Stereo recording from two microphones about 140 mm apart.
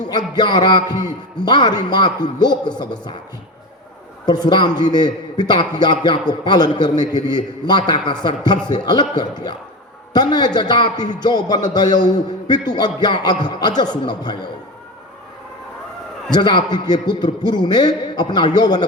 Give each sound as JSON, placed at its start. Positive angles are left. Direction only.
{"t": 0.0, "sound": "a man's voice", "side_deg": 30}
{"t": 4.3, "sound": "a man's voice", "side_deg": 30}
{"t": 16.3, "sound": "a man's voice", "side_deg": 30}